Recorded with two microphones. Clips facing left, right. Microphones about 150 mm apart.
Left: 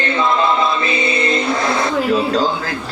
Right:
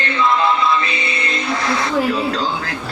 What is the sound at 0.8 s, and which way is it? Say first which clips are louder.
Music: left 6 dB; 25° left (ahead or behind).